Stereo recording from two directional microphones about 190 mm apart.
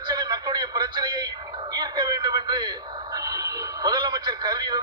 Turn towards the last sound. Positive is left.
turn(degrees=-25)  # may be behind; listen again after turning